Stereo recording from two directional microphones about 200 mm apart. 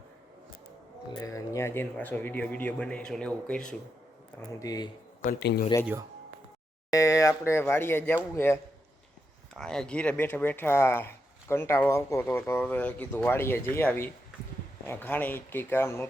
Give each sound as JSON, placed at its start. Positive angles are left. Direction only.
{"t": 1.1, "sound": "speech", "side_deg": 15}
{"t": 4.4, "sound": "speech", "side_deg": 20}
{"t": 5.2, "sound": "speech", "side_deg": 50}
{"t": 5.8, "sound": "speech", "side_deg": -10}
{"t": 6.9, "sound": "speech", "side_deg": 15}
{"t": 9.6, "sound": "speech", "side_deg": 5}